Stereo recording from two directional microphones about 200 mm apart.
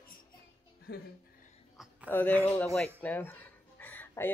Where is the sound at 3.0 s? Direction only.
10° left (ahead or behind).